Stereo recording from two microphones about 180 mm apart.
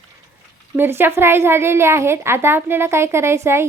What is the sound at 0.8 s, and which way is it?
A woman's voice, 10° right (ahead or behind).